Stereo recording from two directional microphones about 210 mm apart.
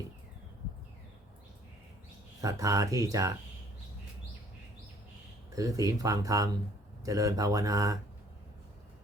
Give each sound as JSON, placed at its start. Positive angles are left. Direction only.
{"t": 2.4, "sound": "speech", "side_deg": -15}
{"t": 5.5, "sound": "speech", "side_deg": -15}